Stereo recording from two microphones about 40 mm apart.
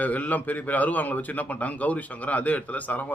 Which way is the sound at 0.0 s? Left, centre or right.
Left.